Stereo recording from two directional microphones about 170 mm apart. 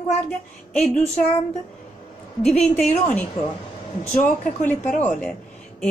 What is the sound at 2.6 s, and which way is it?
Speech, 45° left (ahead or behind).